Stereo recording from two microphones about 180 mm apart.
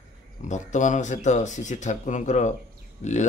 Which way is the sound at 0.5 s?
40° left (ahead or behind).